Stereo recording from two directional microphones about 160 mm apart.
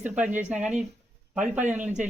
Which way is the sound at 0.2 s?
10° right (ahead or behind).